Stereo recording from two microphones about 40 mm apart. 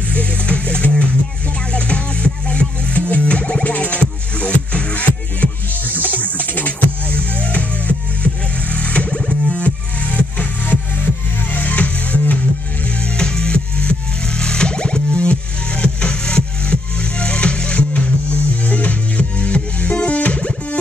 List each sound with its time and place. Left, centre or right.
0.1 s music: left
11.5 s music: left
12.8 s music: left